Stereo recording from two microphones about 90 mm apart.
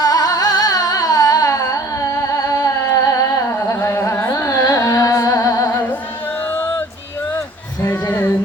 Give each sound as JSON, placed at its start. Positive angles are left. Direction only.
{"t": 0.0, "sound": "carnatic music", "side_deg": 45}
{"t": 2.2, "sound": "singing", "side_deg": 40}
{"t": 3.8, "sound": "music", "side_deg": 25}
{"t": 6.5, "sound": "music", "side_deg": 20}
{"t": 7.3, "sound": "music", "side_deg": 30}